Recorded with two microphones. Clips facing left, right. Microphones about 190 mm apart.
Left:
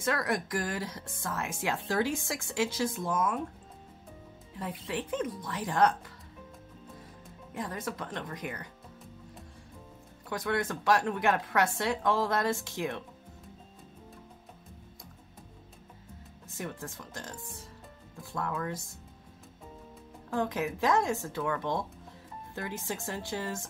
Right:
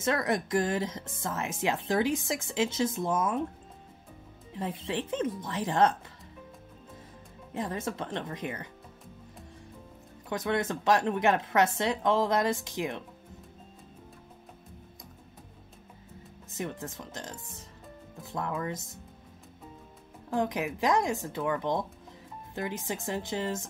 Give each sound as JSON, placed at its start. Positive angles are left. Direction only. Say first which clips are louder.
{"t": 0.0, "sound": "speech", "louder": "right 2 dB", "side_deg": -25}
{"t": 4.6, "sound": "speech", "louder": "right 3 dB", "side_deg": -25}
{"t": 7.5, "sound": "speech", "louder": "right 3 dB", "side_deg": -25}
{"t": 10.3, "sound": "speech", "louder": "right 2 dB", "side_deg": -20}
{"t": 16.5, "sound": "speech", "louder": "right 3 dB", "side_deg": -20}
{"t": 18.3, "sound": "speech", "louder": "right 1 dB", "side_deg": -20}
{"t": 20.2, "sound": "speech", "louder": "right 1 dB", "side_deg": -15}